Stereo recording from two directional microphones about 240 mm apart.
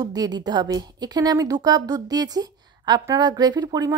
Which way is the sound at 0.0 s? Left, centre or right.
Centre.